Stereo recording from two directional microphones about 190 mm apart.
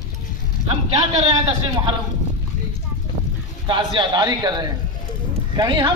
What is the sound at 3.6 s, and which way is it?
A man's voice, 25° right (ahead or behind).